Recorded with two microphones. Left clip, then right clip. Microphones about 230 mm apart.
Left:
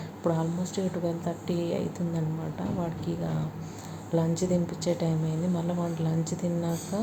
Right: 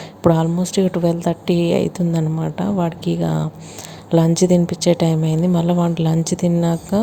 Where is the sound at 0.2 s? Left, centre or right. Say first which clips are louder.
Right 13 dB; right.